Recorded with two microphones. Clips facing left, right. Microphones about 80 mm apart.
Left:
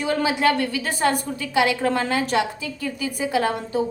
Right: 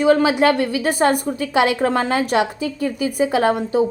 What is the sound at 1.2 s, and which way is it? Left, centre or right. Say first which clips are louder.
A woman's voice: right 4 dB; right.